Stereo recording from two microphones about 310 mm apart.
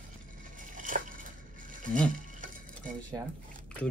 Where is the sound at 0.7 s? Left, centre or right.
Right.